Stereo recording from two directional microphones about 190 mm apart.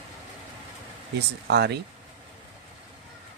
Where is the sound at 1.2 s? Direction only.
60° right (ahead or behind).